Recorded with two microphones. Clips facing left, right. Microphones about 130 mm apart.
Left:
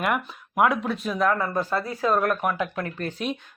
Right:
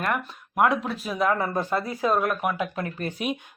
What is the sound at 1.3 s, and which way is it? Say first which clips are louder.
Speech: even; 20° right (ahead or behind).